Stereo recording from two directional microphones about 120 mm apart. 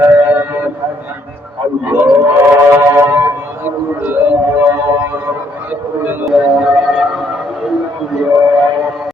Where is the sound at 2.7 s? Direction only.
20° right (ahead or behind); by 7.7 s 5° right (ahead or behind).